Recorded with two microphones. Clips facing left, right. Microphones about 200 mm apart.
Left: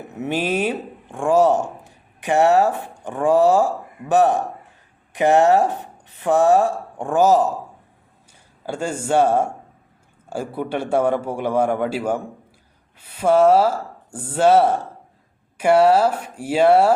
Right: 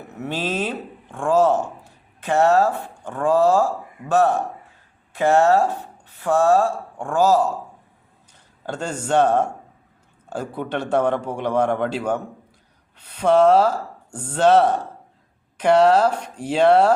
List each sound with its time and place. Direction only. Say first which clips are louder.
0.2 s speech: left 3 dB; 15° left (ahead or behind)
8.6 s speech: left 2 dB; 10° left (ahead or behind)